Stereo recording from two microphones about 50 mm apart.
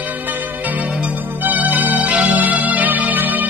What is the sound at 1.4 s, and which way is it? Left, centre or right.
Music, right.